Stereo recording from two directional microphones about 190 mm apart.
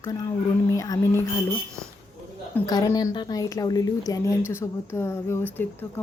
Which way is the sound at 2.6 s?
20° left (ahead or behind).